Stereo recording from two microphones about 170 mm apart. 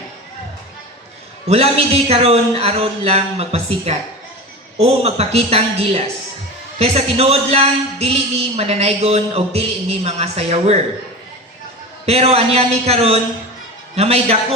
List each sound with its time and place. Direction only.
1.5 s a man's voice: 35° right (ahead or behind)
12.0 s a man's voice: 35° right (ahead or behind)